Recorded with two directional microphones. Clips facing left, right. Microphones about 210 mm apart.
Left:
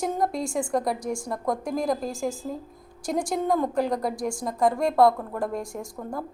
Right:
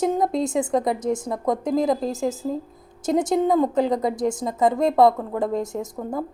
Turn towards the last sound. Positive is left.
turn(degrees=-20)  # may be behind; listen again after turning